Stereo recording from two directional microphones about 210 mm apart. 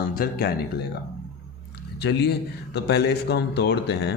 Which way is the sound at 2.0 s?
55° left (ahead or behind).